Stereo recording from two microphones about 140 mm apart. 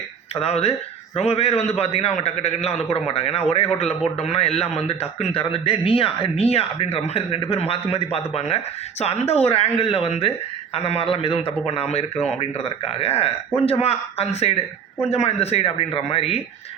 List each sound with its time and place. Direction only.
0.3 s a man's voice: 45° left (ahead or behind)